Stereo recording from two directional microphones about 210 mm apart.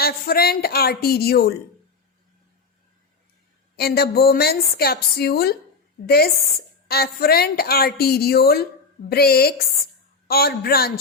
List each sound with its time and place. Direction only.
0.0 s a woman's voice: 45° left (ahead or behind)
3.8 s a woman's voice: 50° left (ahead or behind)